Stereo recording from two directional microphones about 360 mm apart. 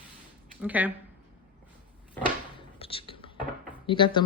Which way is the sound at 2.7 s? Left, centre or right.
Centre.